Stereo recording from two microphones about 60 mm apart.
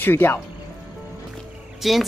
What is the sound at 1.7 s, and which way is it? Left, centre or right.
Speech, centre.